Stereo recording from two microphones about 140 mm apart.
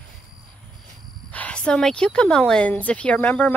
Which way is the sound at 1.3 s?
10° left (ahead or behind).